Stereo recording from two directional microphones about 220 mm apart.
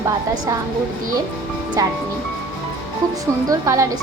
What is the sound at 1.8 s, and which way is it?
Speech, 15° right (ahead or behind).